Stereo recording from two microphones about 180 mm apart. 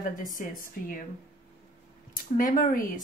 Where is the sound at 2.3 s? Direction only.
50° left (ahead or behind).